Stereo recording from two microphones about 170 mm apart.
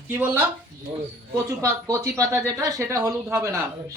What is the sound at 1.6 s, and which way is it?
Speech, 20° right (ahead or behind).